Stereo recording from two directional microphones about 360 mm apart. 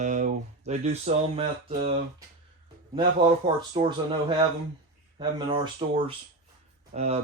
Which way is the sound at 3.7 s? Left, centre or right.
Centre.